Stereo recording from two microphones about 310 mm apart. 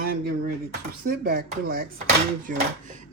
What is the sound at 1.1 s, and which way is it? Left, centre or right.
Speech, right.